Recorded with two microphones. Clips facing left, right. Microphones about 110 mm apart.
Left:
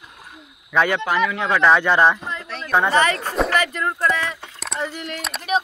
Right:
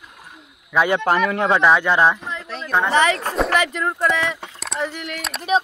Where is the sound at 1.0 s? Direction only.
45° right (ahead or behind).